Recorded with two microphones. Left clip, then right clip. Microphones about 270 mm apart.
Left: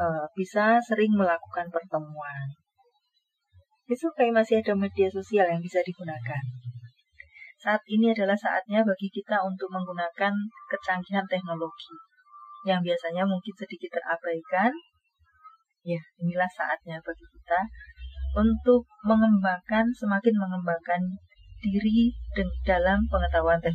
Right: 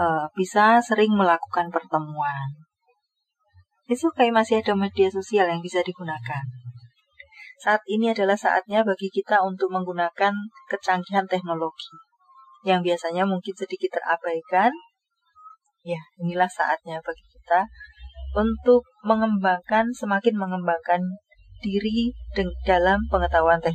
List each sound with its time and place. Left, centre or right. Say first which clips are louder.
0.0 s speech: right 5 dB; right
3.9 s speech: right 4 dB; right
7.6 s speech: right 4 dB; right
12.6 s speech: right 5 dB; right
16.3 s speech: right 5 dB; right